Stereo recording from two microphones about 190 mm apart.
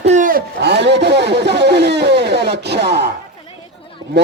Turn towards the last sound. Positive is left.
turn(degrees=-65)  # may be behind; listen again after turning